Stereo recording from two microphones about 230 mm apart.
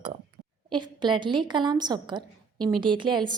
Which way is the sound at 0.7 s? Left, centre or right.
Centre.